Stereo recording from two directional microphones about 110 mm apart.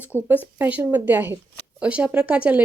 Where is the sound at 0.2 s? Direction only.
20° right (ahead or behind).